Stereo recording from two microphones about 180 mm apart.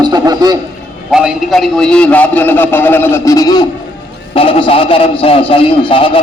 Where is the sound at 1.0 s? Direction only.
Centre (ahead or behind).